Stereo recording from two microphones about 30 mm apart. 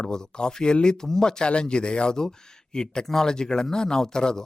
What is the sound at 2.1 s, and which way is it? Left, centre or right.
Speech, left.